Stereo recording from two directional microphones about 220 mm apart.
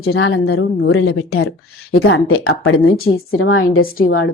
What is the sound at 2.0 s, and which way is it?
A woman's voice, 65° left (ahead or behind).